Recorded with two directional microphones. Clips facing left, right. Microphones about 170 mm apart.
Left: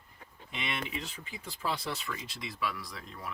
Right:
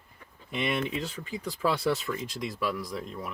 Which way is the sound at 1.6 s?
50° right (ahead or behind).